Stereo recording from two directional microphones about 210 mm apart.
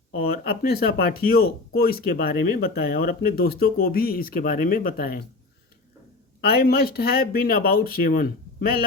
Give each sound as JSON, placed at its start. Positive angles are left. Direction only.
{"t": 0.2, "sound": "speech", "side_deg": 45}
{"t": 6.4, "sound": "speech", "side_deg": 45}